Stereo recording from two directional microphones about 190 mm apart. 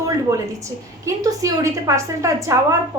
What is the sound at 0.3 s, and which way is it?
A woman's voice, 15° right (ahead or behind).